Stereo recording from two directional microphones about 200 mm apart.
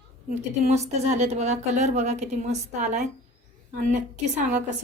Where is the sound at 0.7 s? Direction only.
35° right (ahead or behind).